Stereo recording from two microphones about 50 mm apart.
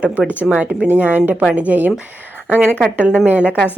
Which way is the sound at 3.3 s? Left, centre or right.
Right.